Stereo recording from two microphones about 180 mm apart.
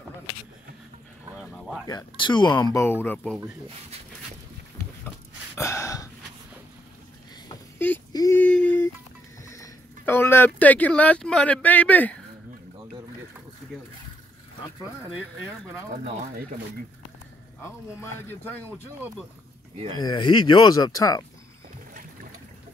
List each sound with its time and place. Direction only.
1.9 s speech: 25° left (ahead or behind)
5.6 s gasp: 15° left (ahead or behind)
8.1 s a sound: 20° left (ahead or behind)
8.4 s a sound: 5° left (ahead or behind)
9.5 s speech: 15° left (ahead or behind)
18.0 s speech: 10° left (ahead or behind)
20.0 s speech: 25° left (ahead or behind)